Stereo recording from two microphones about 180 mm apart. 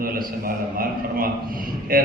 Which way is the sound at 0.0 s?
55° right (ahead or behind).